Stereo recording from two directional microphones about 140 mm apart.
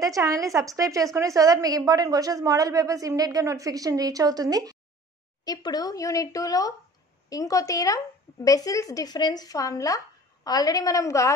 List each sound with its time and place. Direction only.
0.0 s a woman's voice: 25° right (ahead or behind)
5.4 s speech: 30° left (ahead or behind)